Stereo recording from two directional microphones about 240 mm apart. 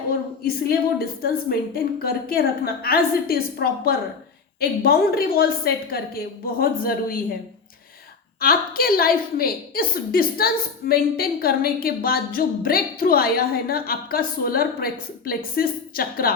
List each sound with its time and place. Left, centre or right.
0.4 s a woman's voice: left
8.4 s a woman's voice: left